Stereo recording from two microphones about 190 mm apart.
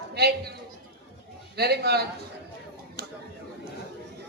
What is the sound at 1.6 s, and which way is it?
Speech, 60° right (ahead or behind).